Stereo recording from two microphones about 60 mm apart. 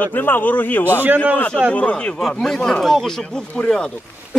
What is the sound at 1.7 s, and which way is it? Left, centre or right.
Speech, left.